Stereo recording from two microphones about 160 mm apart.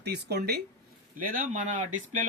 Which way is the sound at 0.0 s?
90° right.